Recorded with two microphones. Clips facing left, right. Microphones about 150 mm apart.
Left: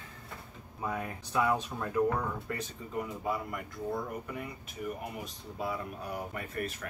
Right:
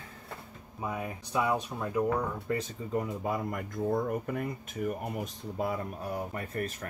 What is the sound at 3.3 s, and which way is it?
Speech, 45° right (ahead or behind).